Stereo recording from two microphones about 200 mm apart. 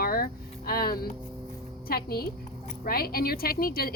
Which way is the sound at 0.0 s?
50° left (ahead or behind).